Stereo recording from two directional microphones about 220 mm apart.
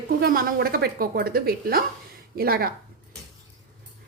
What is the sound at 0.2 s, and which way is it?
A woman's voice, 40° right (ahead or behind).